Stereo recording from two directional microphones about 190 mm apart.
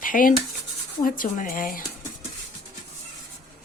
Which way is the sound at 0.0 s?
45° left (ahead or behind).